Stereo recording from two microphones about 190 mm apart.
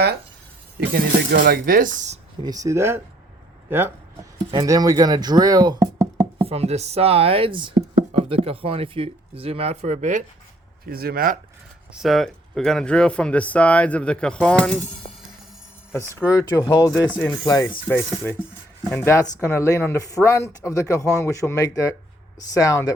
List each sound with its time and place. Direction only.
0.9 s speech: 50° right (ahead or behind)
2.4 s speech: 20° right (ahead or behind)
6.4 s speech: 35° right (ahead or behind)
10.8 s speech: 50° right (ahead or behind)
11.9 s speech: centre (ahead or behind)
16.3 s speech: 15° left (ahead or behind)